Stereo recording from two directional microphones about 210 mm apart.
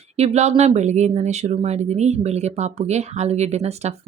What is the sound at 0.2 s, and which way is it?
Speech, 30° right (ahead or behind).